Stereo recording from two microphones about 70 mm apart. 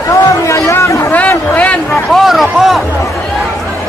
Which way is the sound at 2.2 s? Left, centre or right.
Centre.